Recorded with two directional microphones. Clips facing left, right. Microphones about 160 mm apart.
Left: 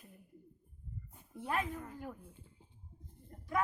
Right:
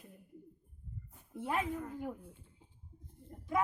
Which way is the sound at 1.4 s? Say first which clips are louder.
Right 2 dB; 15° right (ahead or behind).